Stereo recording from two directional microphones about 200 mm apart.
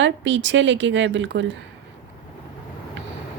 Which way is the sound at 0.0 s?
65° right (ahead or behind).